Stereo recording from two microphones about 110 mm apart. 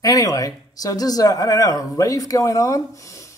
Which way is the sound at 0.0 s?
35° left (ahead or behind).